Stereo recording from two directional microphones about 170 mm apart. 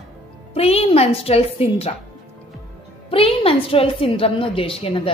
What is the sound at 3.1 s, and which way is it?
A woman's voice, 35° left (ahead or behind).